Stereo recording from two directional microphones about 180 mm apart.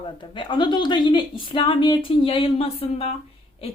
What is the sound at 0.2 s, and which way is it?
A woman's voice, 25° left (ahead or behind).